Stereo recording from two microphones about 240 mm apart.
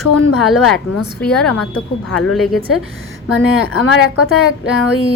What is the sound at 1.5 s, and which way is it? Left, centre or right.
Speech, left.